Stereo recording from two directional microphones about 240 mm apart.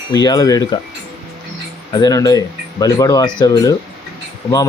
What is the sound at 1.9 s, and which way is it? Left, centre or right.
Speech, centre.